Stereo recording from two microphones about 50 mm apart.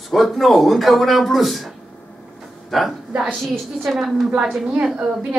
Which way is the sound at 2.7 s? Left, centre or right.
Centre.